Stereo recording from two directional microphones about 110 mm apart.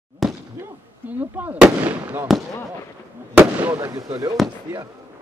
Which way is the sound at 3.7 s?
30° right (ahead or behind).